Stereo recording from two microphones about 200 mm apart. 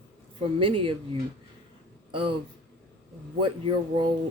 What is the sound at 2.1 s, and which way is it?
Speech, 25° right (ahead or behind).